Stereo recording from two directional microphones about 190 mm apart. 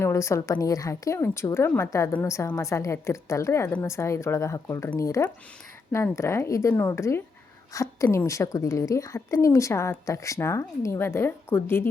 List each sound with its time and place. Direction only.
0.0 s a woman's voice: 15° left (ahead or behind)